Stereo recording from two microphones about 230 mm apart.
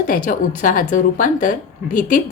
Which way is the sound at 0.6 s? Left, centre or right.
Left.